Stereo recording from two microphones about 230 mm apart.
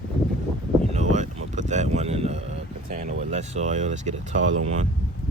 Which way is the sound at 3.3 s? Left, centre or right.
Right.